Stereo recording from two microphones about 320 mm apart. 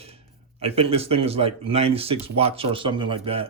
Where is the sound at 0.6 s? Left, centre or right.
Centre.